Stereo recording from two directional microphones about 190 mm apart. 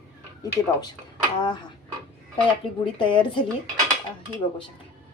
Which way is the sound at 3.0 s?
25° left (ahead or behind).